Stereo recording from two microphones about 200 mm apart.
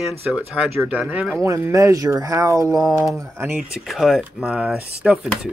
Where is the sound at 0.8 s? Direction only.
5° right (ahead or behind).